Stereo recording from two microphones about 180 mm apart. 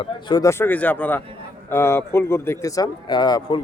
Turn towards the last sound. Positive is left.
turn(degrees=20)  # may be behind; listen again after turning